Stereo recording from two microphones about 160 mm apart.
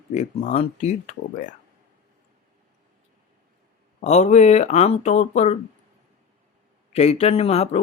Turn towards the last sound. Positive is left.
turn(degrees=40)  # may be behind; listen again after turning